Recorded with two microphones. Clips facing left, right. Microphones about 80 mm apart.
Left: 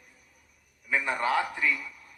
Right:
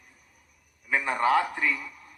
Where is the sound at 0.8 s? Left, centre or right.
Right.